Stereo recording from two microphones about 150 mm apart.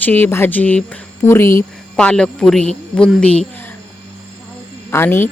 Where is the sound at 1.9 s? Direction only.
5° left (ahead or behind).